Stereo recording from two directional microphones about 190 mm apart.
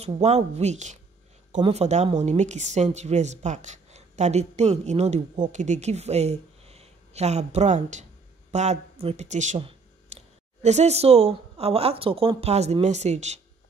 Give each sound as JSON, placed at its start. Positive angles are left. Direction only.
{"t": 0.0, "sound": "speech", "side_deg": -35}